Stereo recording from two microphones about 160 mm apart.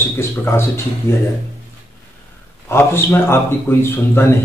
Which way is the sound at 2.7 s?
15° left (ahead or behind).